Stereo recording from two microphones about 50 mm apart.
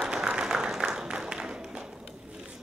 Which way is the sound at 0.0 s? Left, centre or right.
Centre.